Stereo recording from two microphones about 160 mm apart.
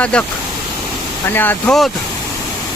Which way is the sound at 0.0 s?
10° left (ahead or behind).